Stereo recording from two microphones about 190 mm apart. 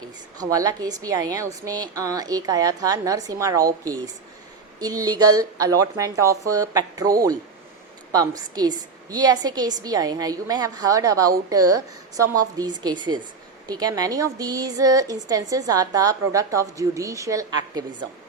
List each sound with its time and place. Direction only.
0.3 s a woman's voice: 20° right (ahead or behind)